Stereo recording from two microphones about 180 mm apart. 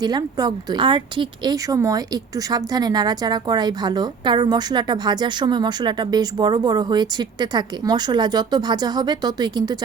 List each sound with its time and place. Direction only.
0.0 s a woman's voice: 20° right (ahead or behind)